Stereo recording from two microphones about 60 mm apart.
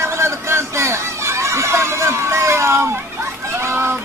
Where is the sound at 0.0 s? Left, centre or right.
Right.